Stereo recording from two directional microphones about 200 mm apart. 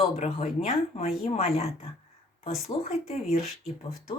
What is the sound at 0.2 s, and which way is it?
Speech, 30° left (ahead or behind).